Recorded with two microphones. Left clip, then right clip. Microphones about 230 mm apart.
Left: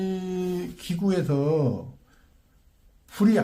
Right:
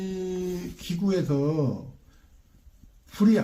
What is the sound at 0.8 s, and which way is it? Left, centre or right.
Speech, left.